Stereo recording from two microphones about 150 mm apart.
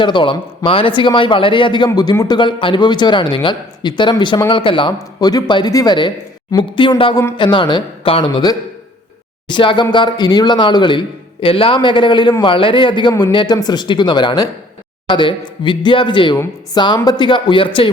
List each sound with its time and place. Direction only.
0.0 s a man's voice: 30° left (ahead or behind)